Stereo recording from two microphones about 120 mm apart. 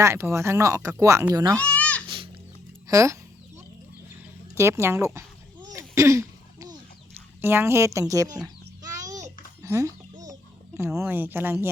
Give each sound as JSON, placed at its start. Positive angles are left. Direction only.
{"t": 0.0, "sound": "speech", "side_deg": -25}
{"t": 1.5, "sound": "a sound", "side_deg": 10}
{"t": 2.0, "sound": "music", "side_deg": -45}
{"t": 2.8, "sound": "speech", "side_deg": -25}
{"t": 4.5, "sound": "speech", "side_deg": -25}
{"t": 5.7, "sound": "throat clearing", "side_deg": -25}
{"t": 7.4, "sound": "speech", "side_deg": -20}
{"t": 8.8, "sound": "a sound", "side_deg": -30}
{"t": 10.8, "sound": "speech", "side_deg": -20}